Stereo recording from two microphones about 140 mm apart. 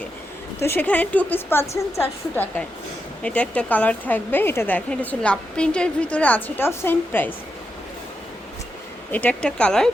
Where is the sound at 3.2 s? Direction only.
10° left (ahead or behind).